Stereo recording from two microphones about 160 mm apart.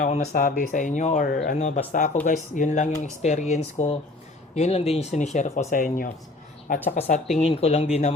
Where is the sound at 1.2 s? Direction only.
65° left (ahead or behind).